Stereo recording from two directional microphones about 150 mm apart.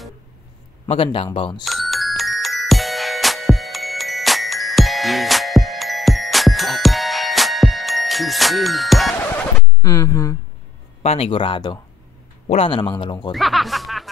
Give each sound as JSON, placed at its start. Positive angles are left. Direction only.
{"t": 0.8, "sound": "speech", "side_deg": 40}
{"t": 1.6, "sound": "music", "side_deg": 0}
{"t": 9.8, "sound": "speech", "side_deg": 25}
{"t": 11.0, "sound": "speech", "side_deg": 40}
{"t": 13.3, "sound": "speech", "side_deg": 0}